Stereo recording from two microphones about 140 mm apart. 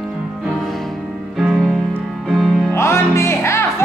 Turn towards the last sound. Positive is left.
turn(degrees=20)  # may be behind; listen again after turning